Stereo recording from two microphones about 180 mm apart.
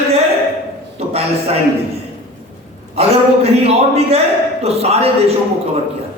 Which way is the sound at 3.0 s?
35° right (ahead or behind).